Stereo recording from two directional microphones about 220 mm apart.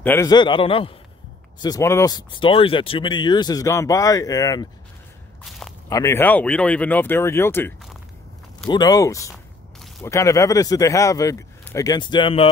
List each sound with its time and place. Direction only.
0.0 s a man's voice: 10° left (ahead or behind)
5.9 s speech: 15° left (ahead or behind)